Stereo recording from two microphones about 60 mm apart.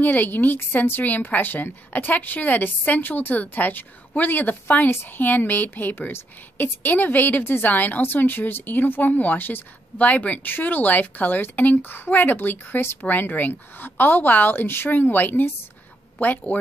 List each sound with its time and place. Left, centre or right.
0.0 s a woman's voice: left